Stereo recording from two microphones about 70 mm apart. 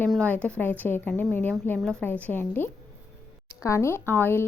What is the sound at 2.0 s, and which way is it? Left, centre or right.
Speech, left.